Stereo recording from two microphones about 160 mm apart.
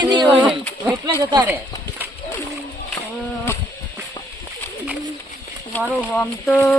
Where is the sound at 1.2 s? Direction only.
30° right (ahead or behind).